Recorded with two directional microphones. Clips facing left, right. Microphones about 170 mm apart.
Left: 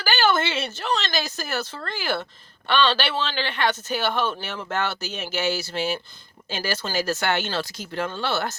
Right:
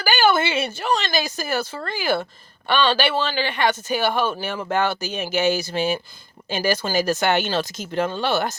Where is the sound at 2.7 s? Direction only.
10° right (ahead or behind).